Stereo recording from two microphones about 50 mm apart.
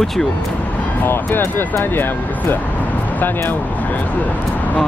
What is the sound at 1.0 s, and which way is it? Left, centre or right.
Speech, left.